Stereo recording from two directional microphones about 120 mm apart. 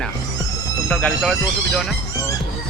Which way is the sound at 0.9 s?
10° left (ahead or behind).